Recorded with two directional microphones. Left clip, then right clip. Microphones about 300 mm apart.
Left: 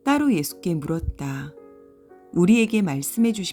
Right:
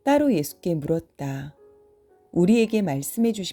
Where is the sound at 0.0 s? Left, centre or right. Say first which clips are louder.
Right 1 dB; centre.